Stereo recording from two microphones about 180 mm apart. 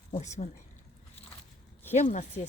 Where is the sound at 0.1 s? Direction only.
40° left (ahead or behind).